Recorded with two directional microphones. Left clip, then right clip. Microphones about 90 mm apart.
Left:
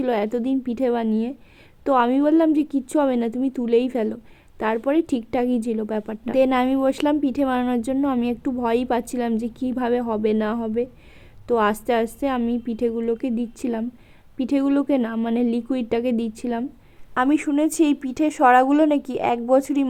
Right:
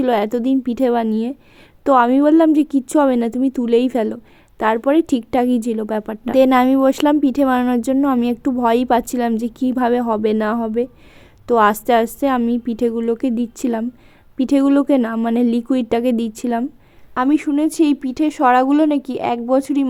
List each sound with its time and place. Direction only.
0.0 s a woman's voice: 30° right (ahead or behind)
17.2 s speech: 20° right (ahead or behind)